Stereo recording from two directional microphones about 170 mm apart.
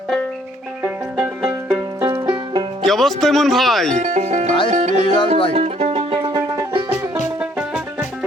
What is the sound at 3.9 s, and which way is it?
Speech, 45° right (ahead or behind).